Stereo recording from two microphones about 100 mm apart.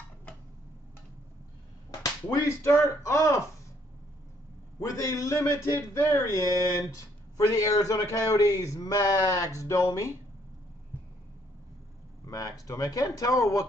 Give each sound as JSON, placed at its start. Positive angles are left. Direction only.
{"t": 2.3, "sound": "a man's voice", "side_deg": 30}
{"t": 4.7, "sound": "a man's voice", "side_deg": 30}
{"t": 12.3, "sound": "a man's voice", "side_deg": 35}